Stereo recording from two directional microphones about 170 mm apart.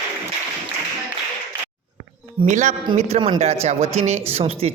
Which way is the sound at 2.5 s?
45° right (ahead or behind).